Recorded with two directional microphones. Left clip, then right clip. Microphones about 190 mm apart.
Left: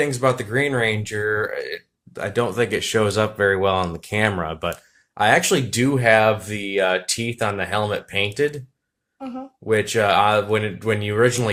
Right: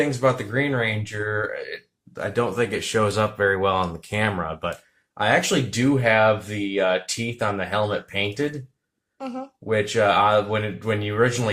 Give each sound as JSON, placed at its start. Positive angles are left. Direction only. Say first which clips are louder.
{"t": 0.0, "sound": "speech", "louder": "left 1 dB", "side_deg": 50}
{"t": 9.1, "sound": "speech", "louder": "right 1 dB", "side_deg": -25}
{"t": 9.6, "sound": "speech", "louder": "left 2 dB", "side_deg": 45}